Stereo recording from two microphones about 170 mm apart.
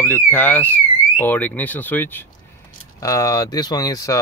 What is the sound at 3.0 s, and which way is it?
Speech, 20° left (ahead or behind).